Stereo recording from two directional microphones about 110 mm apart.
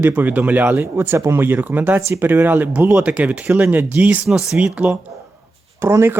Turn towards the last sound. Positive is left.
turn(degrees=-20)  # may be behind; listen again after turning